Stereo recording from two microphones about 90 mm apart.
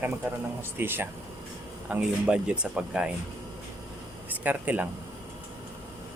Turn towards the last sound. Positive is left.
turn(degrees=-20)  # may be behind; listen again after turning